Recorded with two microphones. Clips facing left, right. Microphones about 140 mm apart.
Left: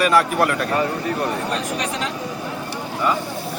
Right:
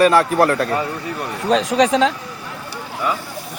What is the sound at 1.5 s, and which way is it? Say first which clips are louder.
Speech: right 9 dB; 90° right.